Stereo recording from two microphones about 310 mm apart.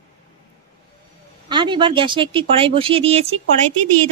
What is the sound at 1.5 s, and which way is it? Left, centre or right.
Speech, centre.